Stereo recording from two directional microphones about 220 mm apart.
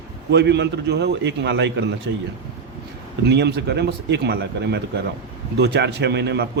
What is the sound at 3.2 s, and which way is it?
A man's voice, 50° right (ahead or behind).